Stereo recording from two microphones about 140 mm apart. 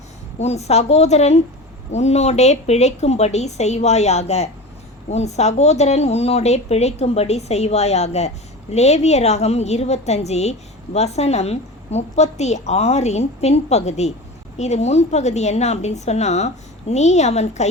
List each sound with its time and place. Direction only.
0.3 s speech: 50° left (ahead or behind)